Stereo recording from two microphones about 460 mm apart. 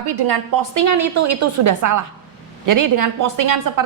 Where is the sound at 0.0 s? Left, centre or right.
Right.